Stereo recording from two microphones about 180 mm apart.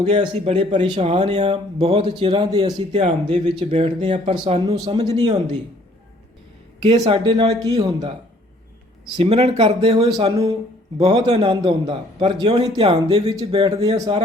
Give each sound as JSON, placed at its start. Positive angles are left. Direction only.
{"t": 0.0, "sound": "a man's voice", "side_deg": -30}
{"t": 6.8, "sound": "a man's voice", "side_deg": -25}
{"t": 9.1, "sound": "a man's voice", "side_deg": -30}